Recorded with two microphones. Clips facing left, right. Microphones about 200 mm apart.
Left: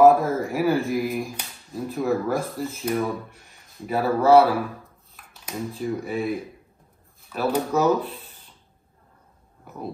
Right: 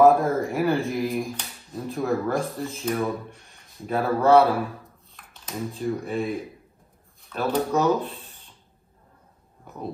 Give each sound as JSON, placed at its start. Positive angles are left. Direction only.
{"t": 0.0, "sound": "a man's voice", "side_deg": 0}